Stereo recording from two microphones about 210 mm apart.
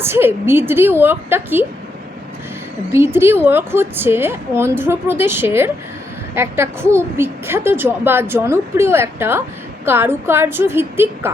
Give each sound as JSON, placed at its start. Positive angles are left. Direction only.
{"t": 0.0, "sound": "a woman's voice", "side_deg": -10}
{"t": 2.9, "sound": "a woman's voice", "side_deg": -10}